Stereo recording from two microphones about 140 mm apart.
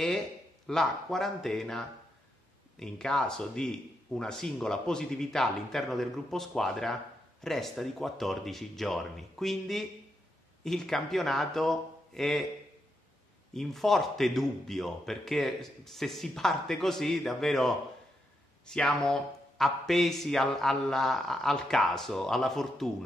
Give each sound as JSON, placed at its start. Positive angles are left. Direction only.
{"t": 0.7, "sound": "a man's voice", "side_deg": 0}
{"t": 13.5, "sound": "a man's voice", "side_deg": 0}